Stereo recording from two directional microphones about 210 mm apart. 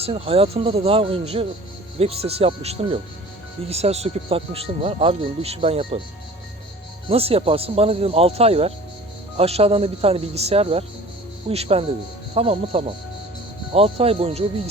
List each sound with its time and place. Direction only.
0.0 s speech: 25° right (ahead or behind)
7.1 s speech: 30° right (ahead or behind)